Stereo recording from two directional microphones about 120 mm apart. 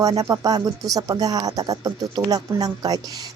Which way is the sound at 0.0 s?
30° right (ahead or behind).